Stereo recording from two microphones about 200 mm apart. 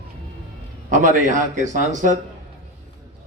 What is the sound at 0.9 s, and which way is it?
A man's voice, 40° right (ahead or behind).